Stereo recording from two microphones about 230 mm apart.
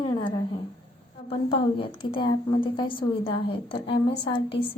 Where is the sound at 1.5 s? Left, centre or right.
Left.